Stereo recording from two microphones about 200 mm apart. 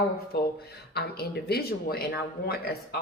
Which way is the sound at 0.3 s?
50° left (ahead or behind).